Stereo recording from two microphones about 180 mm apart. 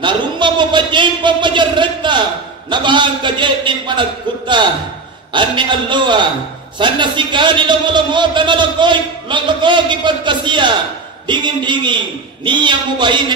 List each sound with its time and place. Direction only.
0.0 s a man's voice: 25° right (ahead or behind)
5.3 s a man's voice: 25° right (ahead or behind)